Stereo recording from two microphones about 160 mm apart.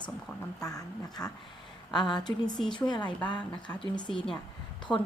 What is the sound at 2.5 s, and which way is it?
Speech, 5° left (ahead or behind).